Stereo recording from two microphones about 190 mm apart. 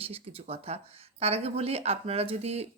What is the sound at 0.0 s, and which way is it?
Speech, 30° right (ahead or behind).